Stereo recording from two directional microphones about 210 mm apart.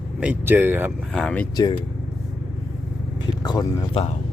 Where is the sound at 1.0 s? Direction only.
5° left (ahead or behind).